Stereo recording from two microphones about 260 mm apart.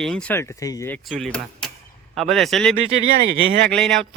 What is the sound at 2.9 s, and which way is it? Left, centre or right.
Speech, right.